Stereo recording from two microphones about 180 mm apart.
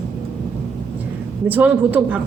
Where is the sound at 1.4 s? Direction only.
10° right (ahead or behind).